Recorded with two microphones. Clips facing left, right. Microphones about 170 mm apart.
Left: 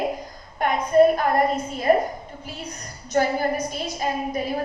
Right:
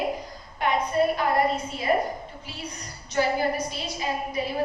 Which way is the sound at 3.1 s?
50° left (ahead or behind).